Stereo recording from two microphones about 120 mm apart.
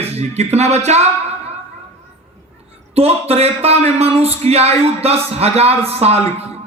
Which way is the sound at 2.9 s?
60° right (ahead or behind).